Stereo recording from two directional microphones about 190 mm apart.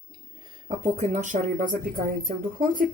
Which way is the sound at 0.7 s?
35° right (ahead or behind).